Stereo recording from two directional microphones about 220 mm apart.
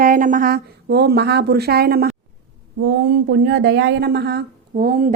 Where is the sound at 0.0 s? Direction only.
40° right (ahead or behind).